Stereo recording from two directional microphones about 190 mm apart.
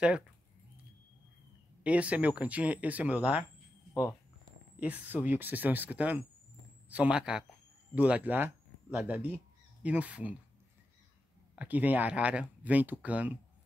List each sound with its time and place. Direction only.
1.8 s speech: 5° right (ahead or behind)
4.7 s speech: 10° right (ahead or behind)
11.5 s speech: 10° right (ahead or behind)